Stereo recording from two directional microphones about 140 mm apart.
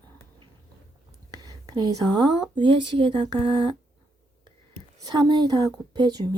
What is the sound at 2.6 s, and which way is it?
Speech, 35° right (ahead or behind).